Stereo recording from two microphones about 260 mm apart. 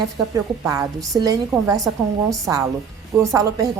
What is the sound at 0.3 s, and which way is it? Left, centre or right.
A woman's voice, centre.